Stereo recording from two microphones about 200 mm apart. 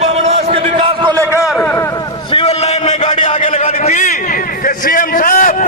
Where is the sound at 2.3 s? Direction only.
35° left (ahead or behind).